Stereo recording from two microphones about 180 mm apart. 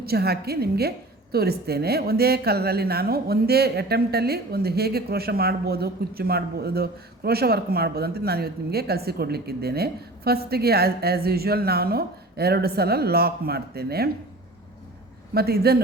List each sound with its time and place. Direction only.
0.0 s a woman's voice: 60° right (ahead or behind)
15.4 s a woman's voice: 60° right (ahead or behind)